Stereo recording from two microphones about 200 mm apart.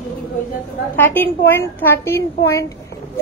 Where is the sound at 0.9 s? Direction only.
10° left (ahead or behind).